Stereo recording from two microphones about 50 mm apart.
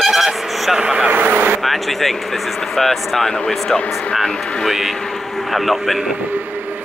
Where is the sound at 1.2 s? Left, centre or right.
Right.